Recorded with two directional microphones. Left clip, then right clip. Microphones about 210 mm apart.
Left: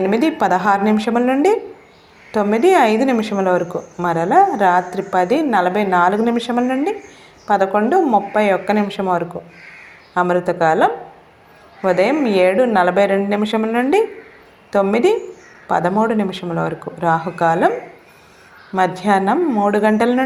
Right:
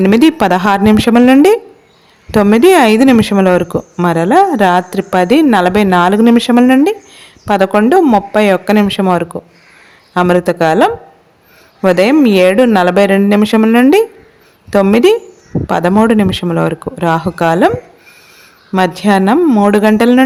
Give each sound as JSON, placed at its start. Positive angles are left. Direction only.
{"t": 0.0, "sound": "a woman's voice", "side_deg": -50}
{"t": 18.7, "sound": "a woman's voice", "side_deg": -50}